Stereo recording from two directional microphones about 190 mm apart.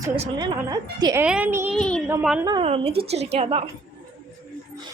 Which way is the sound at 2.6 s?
30° right (ahead or behind).